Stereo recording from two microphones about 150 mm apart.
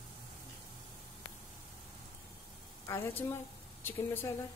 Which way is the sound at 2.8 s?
20° left (ahead or behind).